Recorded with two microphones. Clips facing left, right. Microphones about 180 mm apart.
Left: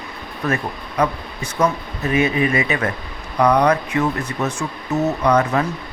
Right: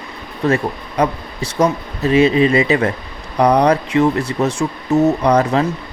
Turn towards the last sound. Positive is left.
turn(degrees=-30)  # may be behind; listen again after turning